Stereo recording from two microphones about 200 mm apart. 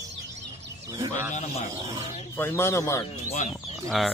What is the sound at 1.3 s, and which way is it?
Speech, 35° left (ahead or behind).